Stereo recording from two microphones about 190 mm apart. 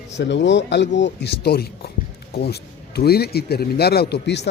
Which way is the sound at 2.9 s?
55° left (ahead or behind).